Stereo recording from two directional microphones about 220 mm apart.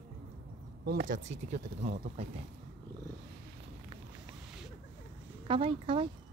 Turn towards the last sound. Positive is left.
turn(degrees=-25)  # may be behind; listen again after turning